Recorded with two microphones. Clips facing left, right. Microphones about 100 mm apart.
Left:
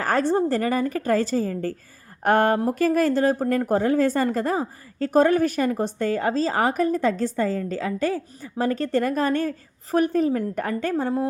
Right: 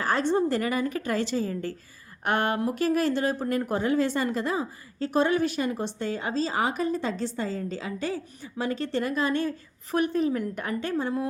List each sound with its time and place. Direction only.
0.0 s a woman's voice: 40° left (ahead or behind)